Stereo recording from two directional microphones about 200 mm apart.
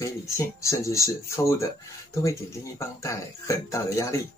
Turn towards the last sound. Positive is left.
turn(degrees=15)  # may be behind; listen again after turning